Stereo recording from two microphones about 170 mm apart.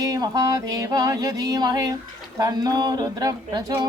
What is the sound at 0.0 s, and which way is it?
Speech, 20° right (ahead or behind).